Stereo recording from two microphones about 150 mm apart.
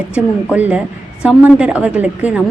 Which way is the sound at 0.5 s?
10° right (ahead or behind).